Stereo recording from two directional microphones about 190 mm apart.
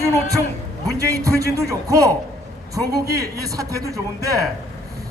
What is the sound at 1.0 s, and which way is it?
A man's voice, 15° right (ahead or behind).